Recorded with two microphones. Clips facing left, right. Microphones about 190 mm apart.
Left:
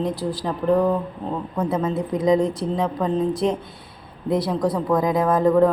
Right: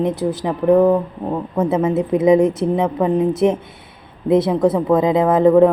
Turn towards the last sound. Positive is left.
turn(degrees=-25)  # may be behind; listen again after turning